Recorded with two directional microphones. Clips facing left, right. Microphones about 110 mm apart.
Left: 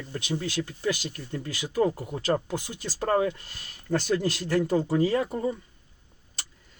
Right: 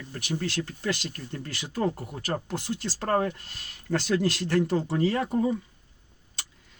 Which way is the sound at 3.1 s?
50° right (ahead or behind).